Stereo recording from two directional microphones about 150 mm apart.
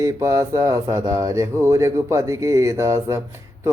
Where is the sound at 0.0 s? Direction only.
20° right (ahead or behind).